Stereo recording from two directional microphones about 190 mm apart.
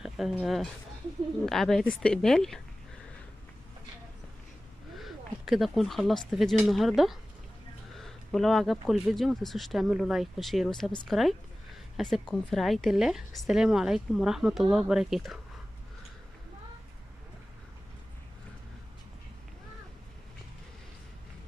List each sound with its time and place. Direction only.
0.0 s speech: 5° right (ahead or behind)
4.9 s speech: centre (ahead or behind)